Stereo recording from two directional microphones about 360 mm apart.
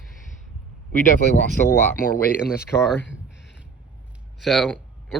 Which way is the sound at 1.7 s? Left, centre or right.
Centre.